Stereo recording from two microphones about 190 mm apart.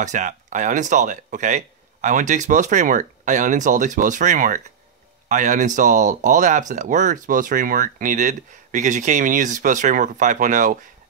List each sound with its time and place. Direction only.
0.0 s speech: 40° right (ahead or behind)